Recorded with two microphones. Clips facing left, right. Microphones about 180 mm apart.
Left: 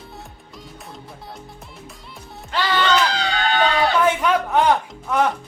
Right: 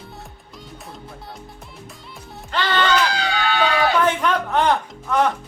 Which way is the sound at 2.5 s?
10° left (ahead or behind).